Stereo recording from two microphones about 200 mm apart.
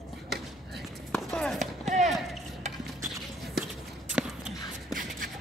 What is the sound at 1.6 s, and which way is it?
Basketball bounce, 35° right (ahead or behind).